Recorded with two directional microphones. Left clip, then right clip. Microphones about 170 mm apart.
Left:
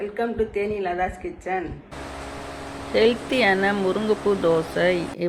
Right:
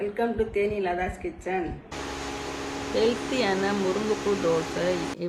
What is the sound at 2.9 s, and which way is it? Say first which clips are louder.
Speech: left 6 dB; 30° left (ahead or behind).